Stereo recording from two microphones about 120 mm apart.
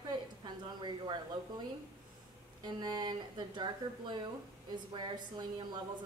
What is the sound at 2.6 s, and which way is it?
Speech, 35° right (ahead or behind).